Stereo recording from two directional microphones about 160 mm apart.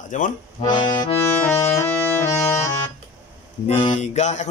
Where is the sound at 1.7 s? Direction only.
15° left (ahead or behind).